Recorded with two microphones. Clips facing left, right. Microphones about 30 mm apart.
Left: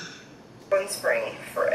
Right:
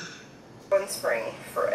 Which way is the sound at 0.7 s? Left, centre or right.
Centre.